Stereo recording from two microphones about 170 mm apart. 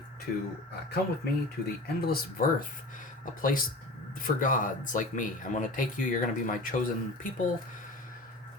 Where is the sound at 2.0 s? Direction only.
60° left (ahead or behind).